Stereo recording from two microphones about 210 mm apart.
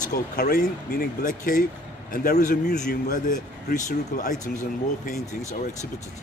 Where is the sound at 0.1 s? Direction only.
45° left (ahead or behind).